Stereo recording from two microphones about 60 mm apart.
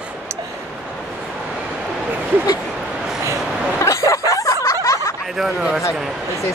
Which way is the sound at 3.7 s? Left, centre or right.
Left.